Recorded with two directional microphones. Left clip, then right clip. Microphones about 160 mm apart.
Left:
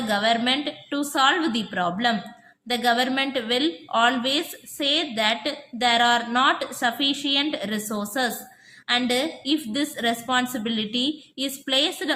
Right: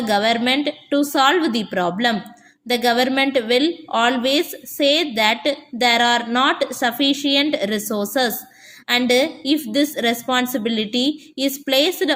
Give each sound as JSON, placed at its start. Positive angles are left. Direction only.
{"t": 0.1, "sound": "a woman's voice", "side_deg": -30}